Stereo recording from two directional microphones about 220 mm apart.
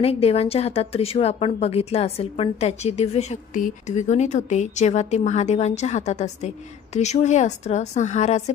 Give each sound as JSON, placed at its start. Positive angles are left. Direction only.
{"t": 0.0, "sound": "a woman's voice", "side_deg": 25}